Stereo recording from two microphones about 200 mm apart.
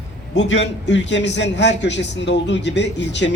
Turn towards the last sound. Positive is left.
turn(degrees=60)  # may be behind; listen again after turning